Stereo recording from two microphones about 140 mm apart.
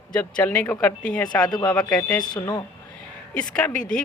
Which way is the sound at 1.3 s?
30° left (ahead or behind).